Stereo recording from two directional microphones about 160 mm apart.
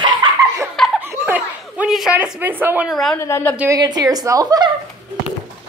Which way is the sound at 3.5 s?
20° right (ahead or behind).